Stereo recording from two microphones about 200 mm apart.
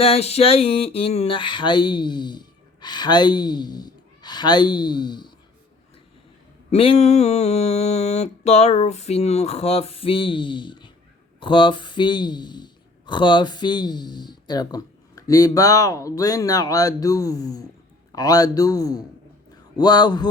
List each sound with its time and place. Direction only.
0.0 s speech: 30° left (ahead or behind)
6.7 s a sound: 30° left (ahead or behind)
11.3 s speech: 25° left (ahead or behind)